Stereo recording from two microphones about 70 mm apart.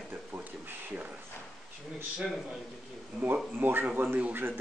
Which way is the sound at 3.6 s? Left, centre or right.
Right.